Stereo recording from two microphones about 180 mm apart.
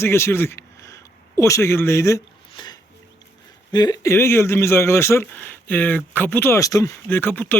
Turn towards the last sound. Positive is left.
turn(degrees=10)  # may be behind; listen again after turning